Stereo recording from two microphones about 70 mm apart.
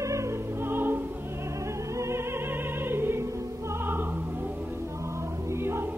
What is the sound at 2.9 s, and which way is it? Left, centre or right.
Music, right.